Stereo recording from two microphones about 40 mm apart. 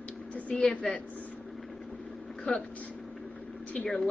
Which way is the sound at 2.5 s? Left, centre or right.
Left.